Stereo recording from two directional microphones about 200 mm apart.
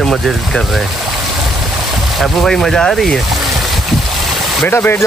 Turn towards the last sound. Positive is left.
turn(degrees=10)  # may be behind; listen again after turning